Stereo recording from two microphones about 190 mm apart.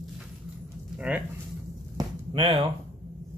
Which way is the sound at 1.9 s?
25° right (ahead or behind).